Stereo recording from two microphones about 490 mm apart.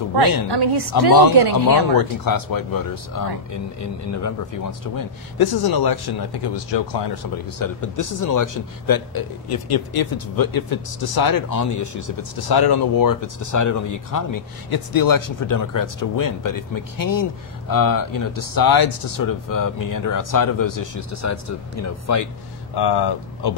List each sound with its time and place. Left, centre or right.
0.5 s a woman's voice: right
1.5 s speech: left
7.5 s a man's voice: left
22.8 s speech: left